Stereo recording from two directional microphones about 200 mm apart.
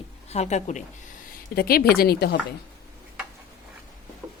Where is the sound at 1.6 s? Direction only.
50° left (ahead or behind).